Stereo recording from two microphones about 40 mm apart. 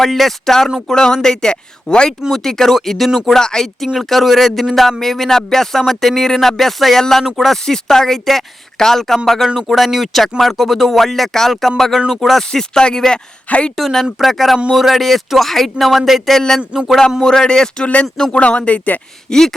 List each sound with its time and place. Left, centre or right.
0.0 s speech: centre
3.9 s speech: centre
7.3 s speech: centre
7.5 s speech: centre
11.9 s speech: centre
12.2 s speech: centre
12.5 s speech: centre
13.5 s speech: left
13.7 s speech: centre
16.8 s speech: right
17.2 s speech: centre
17.8 s speech: left
19.3 s speech: centre